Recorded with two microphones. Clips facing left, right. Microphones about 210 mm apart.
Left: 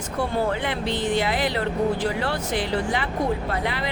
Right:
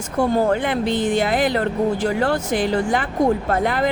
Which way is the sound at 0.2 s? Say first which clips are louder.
Right 7 dB; 50° right (ahead or behind).